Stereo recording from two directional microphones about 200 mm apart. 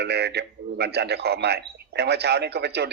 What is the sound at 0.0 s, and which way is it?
A man's voice, 55° right (ahead or behind).